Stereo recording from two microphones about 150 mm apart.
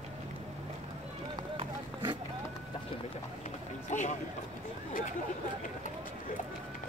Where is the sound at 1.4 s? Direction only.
30° right (ahead or behind).